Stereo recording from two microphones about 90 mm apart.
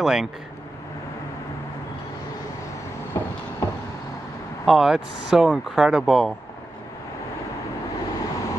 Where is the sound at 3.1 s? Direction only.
30° left (ahead or behind).